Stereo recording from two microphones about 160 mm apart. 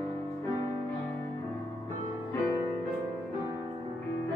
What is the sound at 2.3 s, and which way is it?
Music, 15° left (ahead or behind).